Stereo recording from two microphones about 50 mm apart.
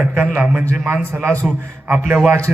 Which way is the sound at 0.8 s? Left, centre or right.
Right.